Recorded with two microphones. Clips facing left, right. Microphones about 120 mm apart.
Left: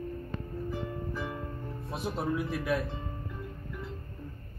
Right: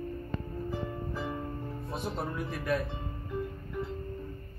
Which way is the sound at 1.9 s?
5° left (ahead or behind).